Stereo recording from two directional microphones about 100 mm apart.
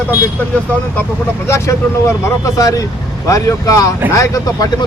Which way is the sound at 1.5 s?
30° left (ahead or behind).